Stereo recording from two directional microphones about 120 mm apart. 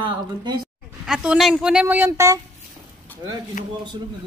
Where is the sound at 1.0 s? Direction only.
5° right (ahead or behind).